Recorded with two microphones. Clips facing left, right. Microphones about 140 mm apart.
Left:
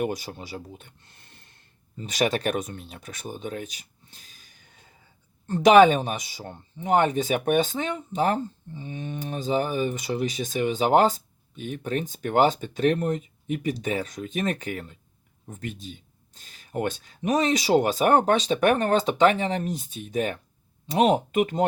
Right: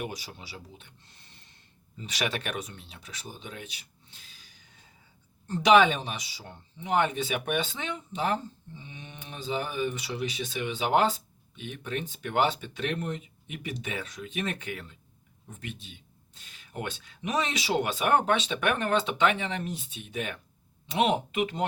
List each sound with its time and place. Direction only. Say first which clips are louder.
0.0 s speech: left 9 dB; 45° left (ahead or behind)